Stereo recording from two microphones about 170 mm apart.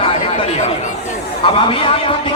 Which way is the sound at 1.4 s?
30° left (ahead or behind).